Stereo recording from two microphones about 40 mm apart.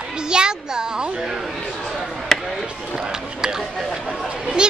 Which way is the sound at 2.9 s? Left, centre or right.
Centre.